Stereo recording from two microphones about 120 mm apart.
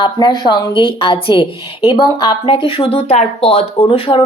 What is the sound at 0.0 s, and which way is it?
Speech, 40° left (ahead or behind).